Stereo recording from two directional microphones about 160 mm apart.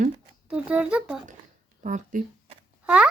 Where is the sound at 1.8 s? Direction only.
50° right (ahead or behind).